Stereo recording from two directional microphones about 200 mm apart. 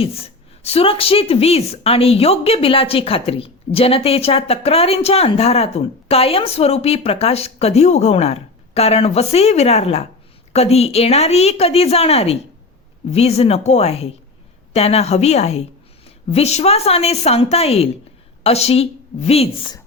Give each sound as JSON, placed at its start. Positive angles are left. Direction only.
{"t": 0.0, "sound": "a woman's voice", "side_deg": 30}